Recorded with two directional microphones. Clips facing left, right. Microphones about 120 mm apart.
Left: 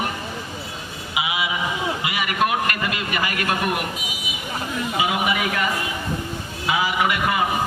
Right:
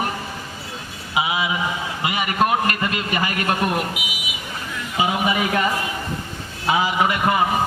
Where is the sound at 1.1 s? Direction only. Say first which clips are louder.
Right 3 dB; 35° right (ahead or behind).